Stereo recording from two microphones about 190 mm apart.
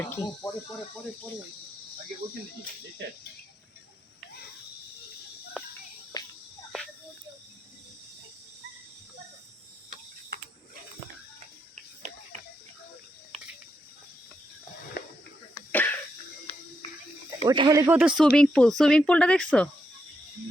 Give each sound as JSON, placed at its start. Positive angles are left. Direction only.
{"t": 0.0, "sound": "speech", "side_deg": 15}
{"t": 5.6, "sound": "music", "side_deg": 0}
{"t": 6.1, "sound": "cricket", "side_deg": 20}
{"t": 11.7, "sound": "a sound", "side_deg": -40}
{"t": 15.5, "sound": "throat clearing", "side_deg": 10}
{"t": 17.4, "sound": "speech", "side_deg": -25}
{"t": 18.2, "sound": "speech", "side_deg": 5}